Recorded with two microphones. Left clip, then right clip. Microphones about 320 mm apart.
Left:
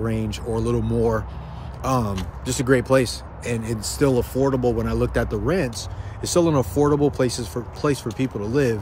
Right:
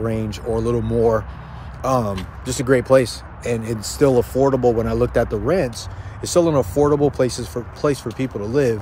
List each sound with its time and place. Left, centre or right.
0.0 s speech: centre